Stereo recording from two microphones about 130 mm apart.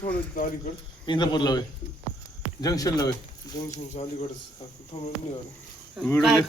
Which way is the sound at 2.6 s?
25° left (ahead or behind).